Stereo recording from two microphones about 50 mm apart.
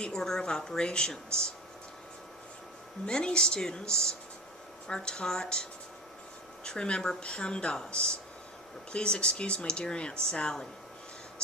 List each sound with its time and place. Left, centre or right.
0.0 s a woman's voice: centre
3.1 s a woman's voice: centre
6.7 s speech: centre